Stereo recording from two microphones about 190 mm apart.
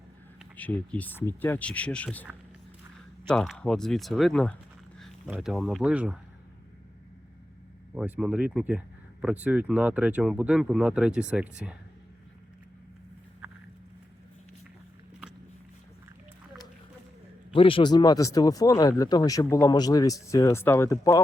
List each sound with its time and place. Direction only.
0.5 s speech: 10° left (ahead or behind)
3.2 s speech: centre (ahead or behind)
7.9 s speech: 5° right (ahead or behind)
17.5 s speech: 30° left (ahead or behind)